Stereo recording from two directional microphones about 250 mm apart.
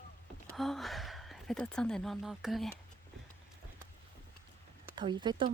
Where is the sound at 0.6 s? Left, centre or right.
Centre.